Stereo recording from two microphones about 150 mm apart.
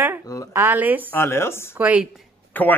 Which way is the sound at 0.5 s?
15° right (ahead or behind).